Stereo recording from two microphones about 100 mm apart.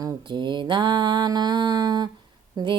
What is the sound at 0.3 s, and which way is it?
Mantra, 50° right (ahead or behind).